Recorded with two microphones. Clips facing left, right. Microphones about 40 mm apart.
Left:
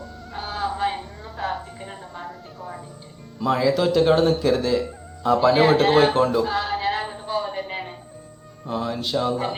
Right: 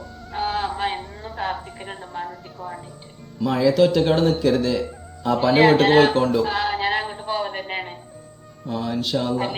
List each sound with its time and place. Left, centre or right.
0.3 s a sound: right
1.4 s music: right
3.4 s a man's voice: centre
5.5 s speech: centre
5.8 s speech: centre
6.4 s music: right
8.6 s speech: centre